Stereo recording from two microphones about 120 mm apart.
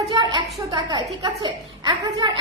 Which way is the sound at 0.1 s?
40° right (ahead or behind).